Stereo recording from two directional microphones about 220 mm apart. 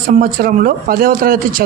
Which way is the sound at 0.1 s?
40° right (ahead or behind).